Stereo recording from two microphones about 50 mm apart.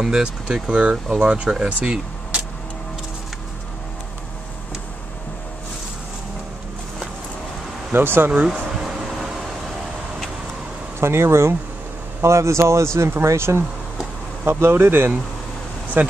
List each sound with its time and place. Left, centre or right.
0.0 s speech: centre
0.7 s speech: right
7.9 s speech: right
8.5 s air conditioning: centre
11.0 s speech: right
12.2 s speech: right
14.4 s speech: right